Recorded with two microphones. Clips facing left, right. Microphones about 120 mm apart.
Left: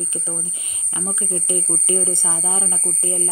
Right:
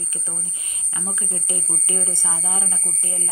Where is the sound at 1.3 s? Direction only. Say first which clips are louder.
Left 7 dB; 25° left (ahead or behind).